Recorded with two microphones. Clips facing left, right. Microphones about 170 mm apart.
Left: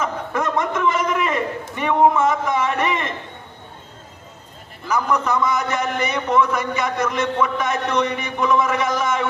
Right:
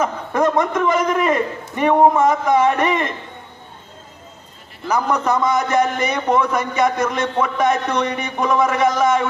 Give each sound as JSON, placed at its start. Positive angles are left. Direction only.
{"t": 0.0, "sound": "a man's voice", "side_deg": -35}
{"t": 4.9, "sound": "a man's voice", "side_deg": -40}